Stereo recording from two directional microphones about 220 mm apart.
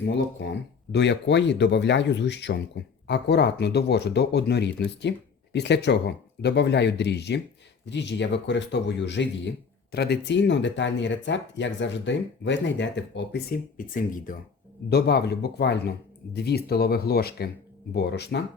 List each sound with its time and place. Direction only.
0.1 s speech: 55° left (ahead or behind)